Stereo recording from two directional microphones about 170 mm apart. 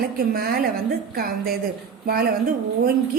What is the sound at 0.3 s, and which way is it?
A woman's voice, 65° right (ahead or behind).